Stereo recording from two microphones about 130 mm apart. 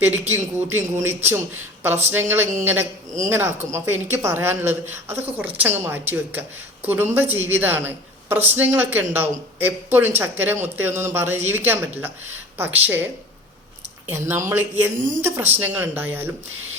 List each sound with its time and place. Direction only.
0.0 s a woman's voice: 15° right (ahead or behind)
2.0 s a woman's voice: 15° right (ahead or behind)
14.1 s a woman's voice: 20° right (ahead or behind)